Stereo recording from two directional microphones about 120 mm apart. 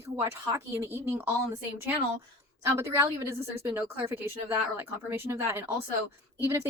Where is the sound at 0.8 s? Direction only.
25° right (ahead or behind).